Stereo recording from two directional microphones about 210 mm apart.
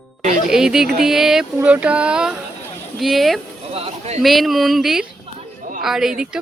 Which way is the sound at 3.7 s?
30° right (ahead or behind).